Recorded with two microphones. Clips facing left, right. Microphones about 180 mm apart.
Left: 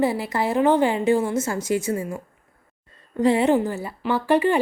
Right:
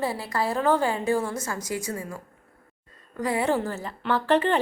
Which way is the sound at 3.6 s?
15° left (ahead or behind).